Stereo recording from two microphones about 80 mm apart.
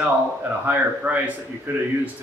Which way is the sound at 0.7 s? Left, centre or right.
Centre.